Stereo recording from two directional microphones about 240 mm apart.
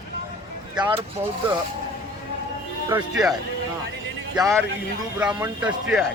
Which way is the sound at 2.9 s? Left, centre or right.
Centre.